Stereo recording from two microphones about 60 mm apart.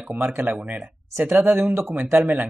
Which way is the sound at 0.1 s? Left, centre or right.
Right.